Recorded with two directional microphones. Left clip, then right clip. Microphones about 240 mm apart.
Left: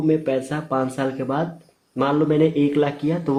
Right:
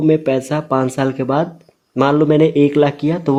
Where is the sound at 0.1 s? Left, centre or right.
Right.